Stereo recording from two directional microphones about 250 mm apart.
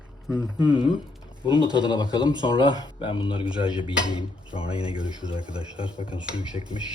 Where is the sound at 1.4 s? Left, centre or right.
Centre.